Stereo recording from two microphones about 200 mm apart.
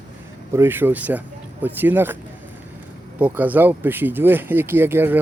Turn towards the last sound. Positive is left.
turn(degrees=-10)  # may be behind; listen again after turning